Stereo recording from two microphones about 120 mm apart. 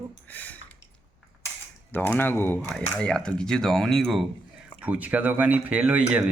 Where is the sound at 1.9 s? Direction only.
15° left (ahead or behind).